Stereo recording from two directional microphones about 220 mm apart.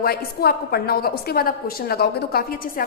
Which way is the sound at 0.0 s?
45° left (ahead or behind).